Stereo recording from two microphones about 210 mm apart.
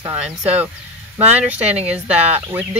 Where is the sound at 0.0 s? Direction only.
10° right (ahead or behind).